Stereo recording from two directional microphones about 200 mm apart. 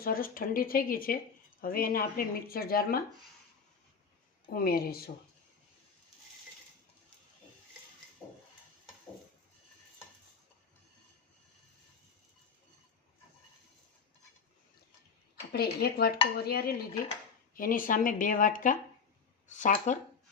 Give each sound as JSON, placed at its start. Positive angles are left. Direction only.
{"t": 0.0, "sound": "speech", "side_deg": 45}
{"t": 4.4, "sound": "speech", "side_deg": 50}
{"t": 15.5, "sound": "speech", "side_deg": 50}